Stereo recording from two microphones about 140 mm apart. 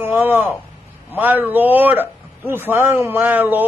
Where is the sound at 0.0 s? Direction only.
15° right (ahead or behind).